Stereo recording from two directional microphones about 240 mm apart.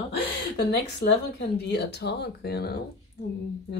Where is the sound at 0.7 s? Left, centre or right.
Left.